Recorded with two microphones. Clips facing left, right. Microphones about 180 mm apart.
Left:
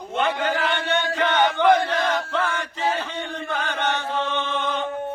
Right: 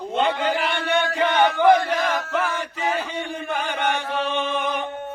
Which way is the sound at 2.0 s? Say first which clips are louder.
Even; 25° left (ahead or behind).